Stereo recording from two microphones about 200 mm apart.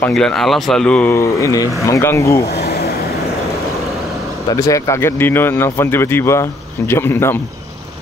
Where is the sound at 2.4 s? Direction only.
50° left (ahead or behind).